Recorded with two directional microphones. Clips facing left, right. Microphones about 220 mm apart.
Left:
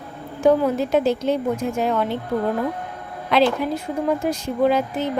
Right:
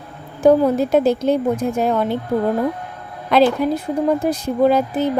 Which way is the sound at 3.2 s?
45° right (ahead or behind).